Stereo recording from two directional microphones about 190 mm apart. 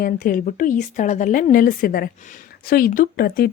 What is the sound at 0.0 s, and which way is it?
A woman's voice, 45° left (ahead or behind).